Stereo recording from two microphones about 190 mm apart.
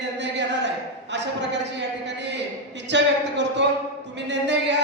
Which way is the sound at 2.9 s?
65° right (ahead or behind).